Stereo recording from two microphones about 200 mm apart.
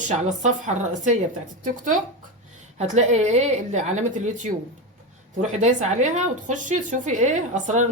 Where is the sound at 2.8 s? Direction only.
35° right (ahead or behind).